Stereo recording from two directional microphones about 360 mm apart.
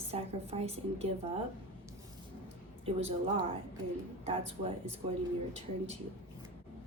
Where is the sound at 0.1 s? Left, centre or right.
Centre.